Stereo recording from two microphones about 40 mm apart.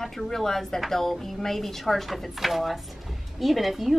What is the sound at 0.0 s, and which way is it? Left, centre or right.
Speech, centre.